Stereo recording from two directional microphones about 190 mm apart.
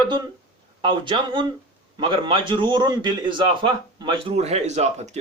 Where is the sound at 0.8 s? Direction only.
25° right (ahead or behind).